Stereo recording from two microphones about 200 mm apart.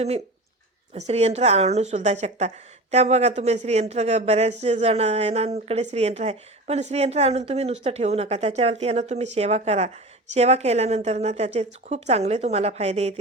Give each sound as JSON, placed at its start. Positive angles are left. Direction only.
{"t": 0.9, "sound": "a woman's voice", "side_deg": -35}